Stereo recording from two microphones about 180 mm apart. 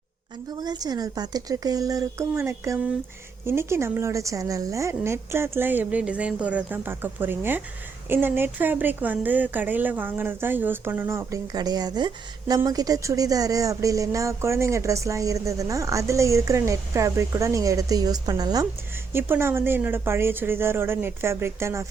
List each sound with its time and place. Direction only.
0.6 s a woman's voice: 20° right (ahead or behind)